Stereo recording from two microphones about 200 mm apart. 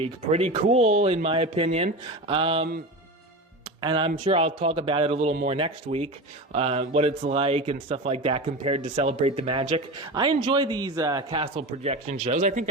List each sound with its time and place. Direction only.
0.0 s speech: 30° right (ahead or behind)
3.8 s speech: 25° right (ahead or behind); by 12.6 s 40° right (ahead or behind)